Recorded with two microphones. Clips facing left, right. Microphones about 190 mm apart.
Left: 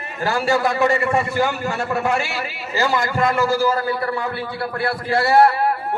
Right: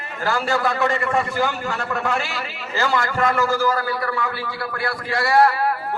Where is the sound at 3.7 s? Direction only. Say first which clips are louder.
Left 2 dB; 25° left (ahead or behind).